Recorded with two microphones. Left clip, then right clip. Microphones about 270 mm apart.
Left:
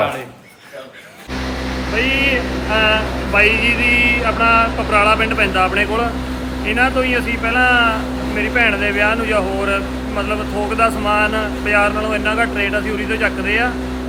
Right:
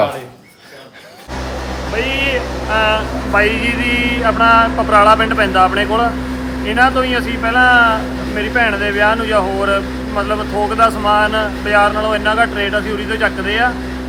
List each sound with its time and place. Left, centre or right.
2.7 s vehicle: centre
3.4 s vehicle: right
4.4 s speech: centre
10.8 s speech: centre